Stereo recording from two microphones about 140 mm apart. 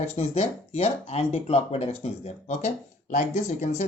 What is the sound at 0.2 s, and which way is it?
Speech, 50° left (ahead or behind).